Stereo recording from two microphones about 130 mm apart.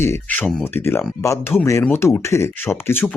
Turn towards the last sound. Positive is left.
turn(degrees=15)  # may be behind; listen again after turning